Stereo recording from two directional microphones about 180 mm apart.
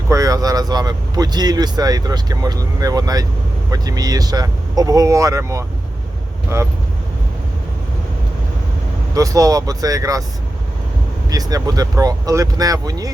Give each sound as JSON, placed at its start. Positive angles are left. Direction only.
{"t": 0.1, "sound": "speech", "side_deg": -20}
{"t": 9.1, "sound": "speech", "side_deg": -20}
{"t": 11.3, "sound": "speech", "side_deg": -20}